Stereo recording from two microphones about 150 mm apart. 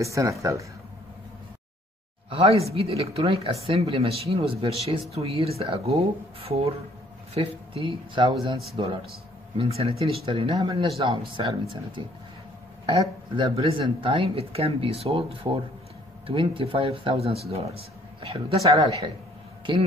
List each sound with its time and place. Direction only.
0.0 s speech: 20° right (ahead or behind)
2.2 s speech: 40° right (ahead or behind)
18.6 s speech: 25° right (ahead or behind)